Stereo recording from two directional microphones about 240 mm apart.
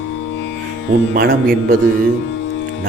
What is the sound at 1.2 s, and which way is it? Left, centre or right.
Speech, right.